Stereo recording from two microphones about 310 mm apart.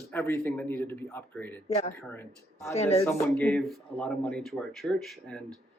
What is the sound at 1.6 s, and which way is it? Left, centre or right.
Speech, left.